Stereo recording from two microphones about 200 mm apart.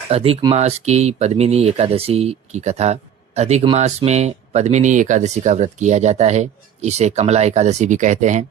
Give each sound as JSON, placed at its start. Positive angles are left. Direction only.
{"t": 0.1, "sound": "speech", "side_deg": -30}